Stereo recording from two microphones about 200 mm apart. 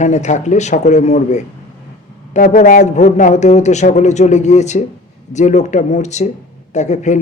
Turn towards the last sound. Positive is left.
turn(degrees=35)  # may be behind; listen again after turning